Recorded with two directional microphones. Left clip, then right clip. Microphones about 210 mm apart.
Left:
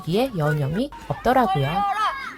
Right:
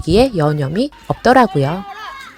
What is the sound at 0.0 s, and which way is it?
Speech, 30° right (ahead or behind).